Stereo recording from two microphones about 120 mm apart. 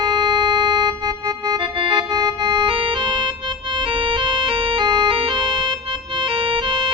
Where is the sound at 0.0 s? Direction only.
40° right (ahead or behind).